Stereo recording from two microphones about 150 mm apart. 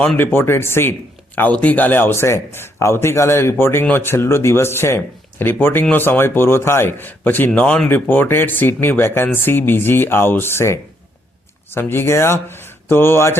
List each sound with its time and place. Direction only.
0.0 s a man's voice: 10° left (ahead or behind)